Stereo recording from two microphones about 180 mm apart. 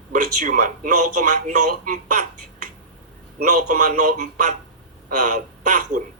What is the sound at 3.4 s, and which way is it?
Speech, 45° right (ahead or behind).